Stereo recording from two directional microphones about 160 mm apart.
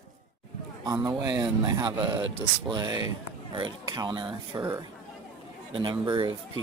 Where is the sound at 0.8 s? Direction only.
25° right (ahead or behind).